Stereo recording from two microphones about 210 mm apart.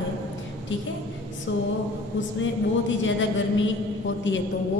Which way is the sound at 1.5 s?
65° left (ahead or behind).